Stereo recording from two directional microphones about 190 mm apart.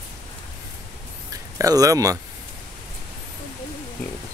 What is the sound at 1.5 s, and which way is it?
Speech, 15° right (ahead or behind).